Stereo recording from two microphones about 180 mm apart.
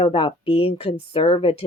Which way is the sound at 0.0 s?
30° left (ahead or behind).